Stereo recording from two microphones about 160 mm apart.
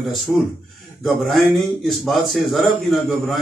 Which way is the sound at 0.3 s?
Centre (ahead or behind).